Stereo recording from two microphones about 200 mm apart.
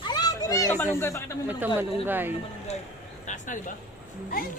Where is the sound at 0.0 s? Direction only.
20° left (ahead or behind).